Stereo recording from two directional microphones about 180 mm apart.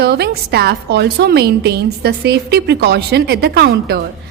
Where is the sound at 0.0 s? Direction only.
65° right (ahead or behind).